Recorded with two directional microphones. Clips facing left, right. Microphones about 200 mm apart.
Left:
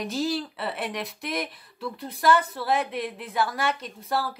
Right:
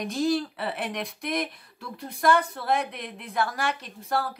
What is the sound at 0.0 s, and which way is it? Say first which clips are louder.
A woman's voice: right 2 dB; centre (ahead or behind).